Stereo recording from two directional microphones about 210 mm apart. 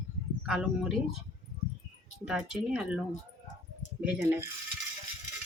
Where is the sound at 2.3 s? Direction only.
5° right (ahead or behind).